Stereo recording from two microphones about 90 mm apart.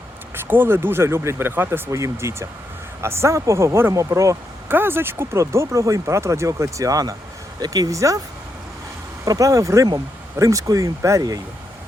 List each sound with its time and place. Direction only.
0.3 s speech: 25° right (ahead or behind)
1.9 s speech: 35° right (ahead or behind)
4.7 s speech: 25° right (ahead or behind)
9.2 s speech: 40° right (ahead or behind)